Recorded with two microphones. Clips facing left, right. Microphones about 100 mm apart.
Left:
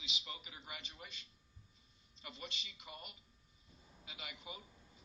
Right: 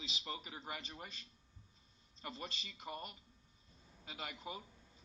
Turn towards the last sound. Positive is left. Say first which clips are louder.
# right 5 dB
turn(degrees=-40)  # may be behind; listen again after turning